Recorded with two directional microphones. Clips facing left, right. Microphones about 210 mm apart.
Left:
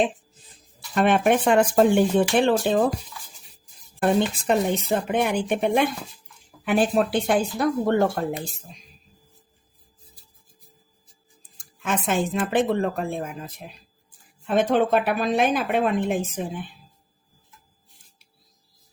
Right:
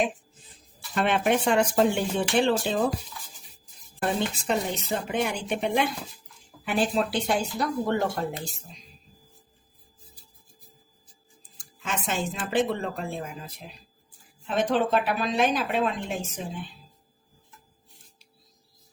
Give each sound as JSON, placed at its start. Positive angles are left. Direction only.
{"t": 0.9, "sound": "speech", "side_deg": 50}
{"t": 4.4, "sound": "speech", "side_deg": 55}
{"t": 11.8, "sound": "a woman's voice", "side_deg": 55}